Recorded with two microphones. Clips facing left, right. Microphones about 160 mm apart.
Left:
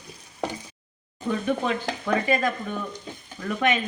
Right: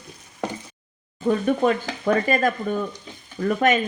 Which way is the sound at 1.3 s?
50° right (ahead or behind).